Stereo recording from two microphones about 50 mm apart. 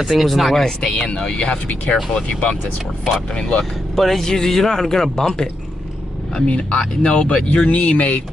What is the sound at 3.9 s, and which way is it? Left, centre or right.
Speech, centre.